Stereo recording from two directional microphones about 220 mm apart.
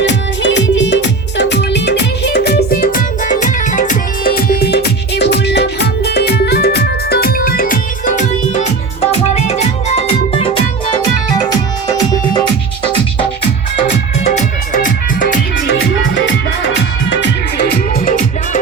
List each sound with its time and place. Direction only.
0.0 s music: 55° left (ahead or behind); by 10.6 s 25° left (ahead or behind)
14.3 s music: 35° left (ahead or behind)
16.7 s music: 55° left (ahead or behind)
18.0 s music: 40° left (ahead or behind)